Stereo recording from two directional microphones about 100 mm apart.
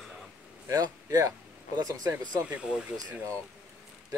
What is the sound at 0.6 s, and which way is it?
A man's voice, 35° right (ahead or behind).